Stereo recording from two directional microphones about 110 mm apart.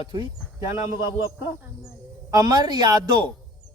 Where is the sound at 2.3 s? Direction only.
35° right (ahead or behind).